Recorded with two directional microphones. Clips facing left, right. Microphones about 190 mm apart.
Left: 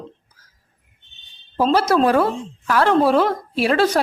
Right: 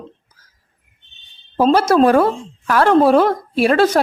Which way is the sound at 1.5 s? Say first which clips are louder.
Right 4 dB; 50° right (ahead or behind).